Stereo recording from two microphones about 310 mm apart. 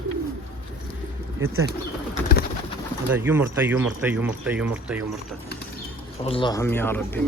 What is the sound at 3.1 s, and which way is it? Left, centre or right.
Speech, centre.